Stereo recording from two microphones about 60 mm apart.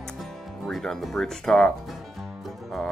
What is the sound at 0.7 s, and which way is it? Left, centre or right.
Speech, centre.